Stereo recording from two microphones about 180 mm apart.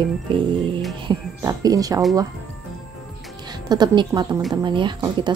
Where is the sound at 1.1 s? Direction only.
20° right (ahead or behind).